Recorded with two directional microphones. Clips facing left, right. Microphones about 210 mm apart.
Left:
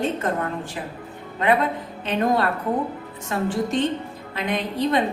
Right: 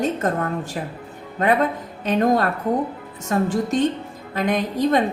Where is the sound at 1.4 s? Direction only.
45° right (ahead or behind).